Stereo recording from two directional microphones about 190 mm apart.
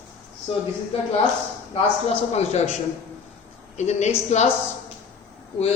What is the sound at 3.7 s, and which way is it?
Speech, 35° left (ahead or behind).